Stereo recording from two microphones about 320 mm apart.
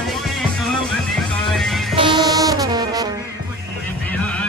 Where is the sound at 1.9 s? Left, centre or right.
Centre.